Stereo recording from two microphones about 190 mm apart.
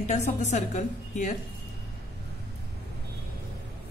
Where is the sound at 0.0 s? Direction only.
40° left (ahead or behind).